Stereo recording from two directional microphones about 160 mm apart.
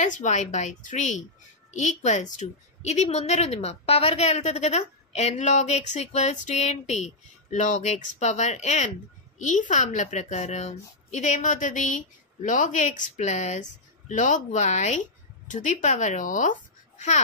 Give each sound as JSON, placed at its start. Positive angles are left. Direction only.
{"t": 0.0, "sound": "a woman's voice", "side_deg": 50}